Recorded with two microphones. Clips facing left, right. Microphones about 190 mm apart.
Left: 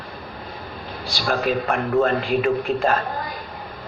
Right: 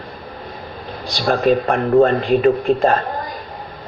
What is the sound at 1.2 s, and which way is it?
A man's voice, 35° right (ahead or behind).